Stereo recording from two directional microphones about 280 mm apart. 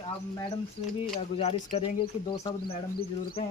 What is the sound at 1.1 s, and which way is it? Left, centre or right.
Speech, left.